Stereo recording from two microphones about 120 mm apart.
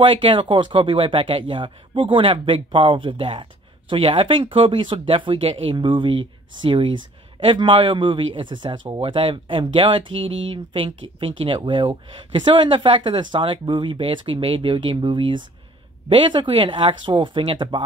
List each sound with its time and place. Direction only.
0.0 s speech: 45° right (ahead or behind)